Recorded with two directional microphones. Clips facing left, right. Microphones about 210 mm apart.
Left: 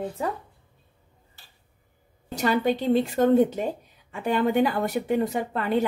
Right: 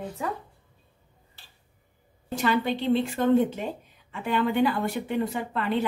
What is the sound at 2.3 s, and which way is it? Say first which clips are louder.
Speech: left 2 dB; 40° left (ahead or behind).